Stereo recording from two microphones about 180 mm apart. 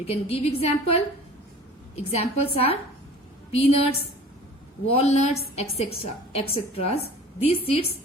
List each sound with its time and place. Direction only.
0.0 s a woman's voice: 35° left (ahead or behind)